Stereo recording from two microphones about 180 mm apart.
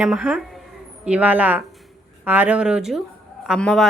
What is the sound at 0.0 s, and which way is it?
Speech, 5° right (ahead or behind).